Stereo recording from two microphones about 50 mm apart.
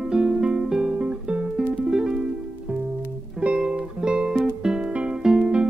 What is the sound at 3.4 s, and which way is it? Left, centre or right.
Music, centre.